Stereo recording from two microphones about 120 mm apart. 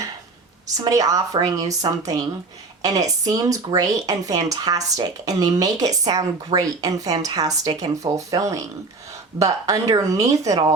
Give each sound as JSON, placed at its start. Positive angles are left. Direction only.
{"t": 0.8, "sound": "a woman's voice", "side_deg": -30}